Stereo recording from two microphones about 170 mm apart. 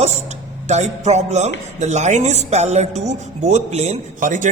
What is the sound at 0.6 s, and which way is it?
Music, 40° right (ahead or behind).